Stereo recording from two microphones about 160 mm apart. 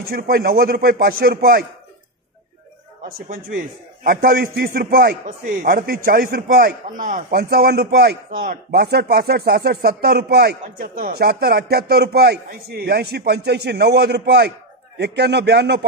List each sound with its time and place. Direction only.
0.0 s speech: 70° right (ahead or behind)
3.0 s a man's voice: 60° right (ahead or behind); by 15.8 s 90° right